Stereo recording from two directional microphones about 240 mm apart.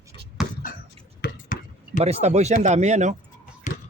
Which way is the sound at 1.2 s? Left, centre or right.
Left.